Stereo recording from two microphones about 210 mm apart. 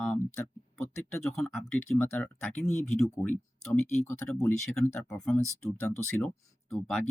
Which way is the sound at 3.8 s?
35° left (ahead or behind).